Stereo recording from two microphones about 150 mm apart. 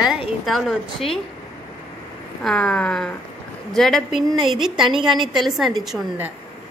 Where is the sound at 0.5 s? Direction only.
Centre (ahead or behind).